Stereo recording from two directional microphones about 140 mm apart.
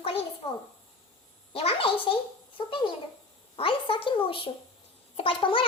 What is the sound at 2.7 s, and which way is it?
A child's voice, 40° left (ahead or behind).